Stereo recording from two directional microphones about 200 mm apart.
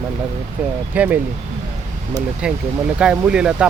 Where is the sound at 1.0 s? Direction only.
5° right (ahead or behind).